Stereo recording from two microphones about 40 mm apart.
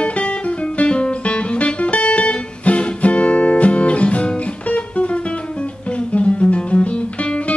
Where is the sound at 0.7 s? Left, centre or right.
Left.